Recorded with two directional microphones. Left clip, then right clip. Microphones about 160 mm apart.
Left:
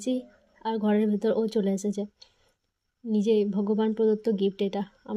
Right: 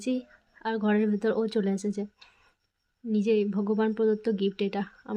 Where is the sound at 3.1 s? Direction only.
Centre (ahead or behind).